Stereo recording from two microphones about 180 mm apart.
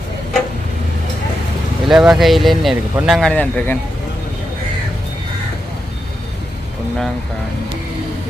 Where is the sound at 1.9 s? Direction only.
Centre (ahead or behind).